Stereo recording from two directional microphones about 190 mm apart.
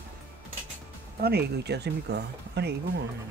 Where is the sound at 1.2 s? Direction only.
60° right (ahead or behind).